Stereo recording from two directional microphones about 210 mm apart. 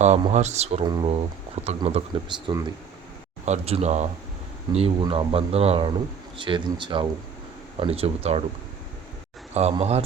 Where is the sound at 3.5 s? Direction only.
30° right (ahead or behind).